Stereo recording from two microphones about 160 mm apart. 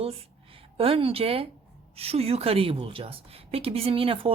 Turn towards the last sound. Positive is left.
turn(degrees=-35)  # may be behind; listen again after turning